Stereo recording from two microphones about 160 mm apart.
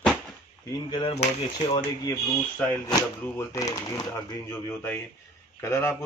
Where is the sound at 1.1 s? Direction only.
40° left (ahead or behind).